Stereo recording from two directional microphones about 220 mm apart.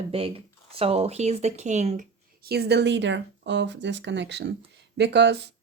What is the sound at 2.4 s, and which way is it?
Speech, 45° right (ahead or behind).